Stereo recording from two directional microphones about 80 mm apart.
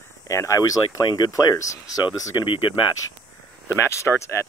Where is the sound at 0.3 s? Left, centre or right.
Left.